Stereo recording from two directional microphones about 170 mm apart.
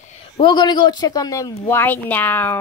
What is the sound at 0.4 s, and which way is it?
Speech, 25° left (ahead or behind).